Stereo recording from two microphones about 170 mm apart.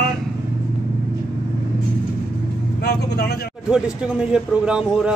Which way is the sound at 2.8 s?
70° left (ahead or behind).